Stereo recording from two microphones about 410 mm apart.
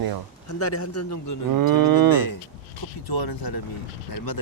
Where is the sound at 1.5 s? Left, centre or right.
Right.